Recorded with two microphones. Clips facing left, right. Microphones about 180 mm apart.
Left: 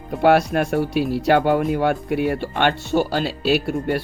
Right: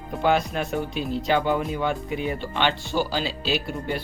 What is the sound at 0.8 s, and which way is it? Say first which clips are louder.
Speech: left 7 dB; 75° left (ahead or behind).